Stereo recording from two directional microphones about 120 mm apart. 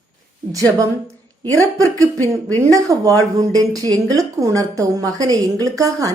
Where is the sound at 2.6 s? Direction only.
30° right (ahead or behind).